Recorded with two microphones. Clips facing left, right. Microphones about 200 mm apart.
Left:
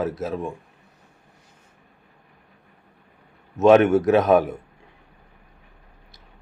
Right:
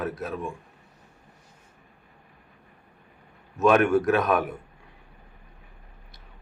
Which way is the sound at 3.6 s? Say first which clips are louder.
Left 5 dB; 25° left (ahead or behind).